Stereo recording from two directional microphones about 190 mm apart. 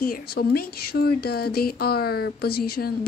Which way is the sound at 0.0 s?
55° left (ahead or behind).